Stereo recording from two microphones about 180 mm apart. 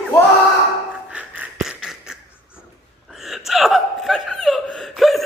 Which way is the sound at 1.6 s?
Centre (ahead or behind).